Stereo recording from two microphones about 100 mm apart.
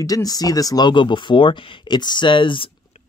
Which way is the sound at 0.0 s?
40° left (ahead or behind).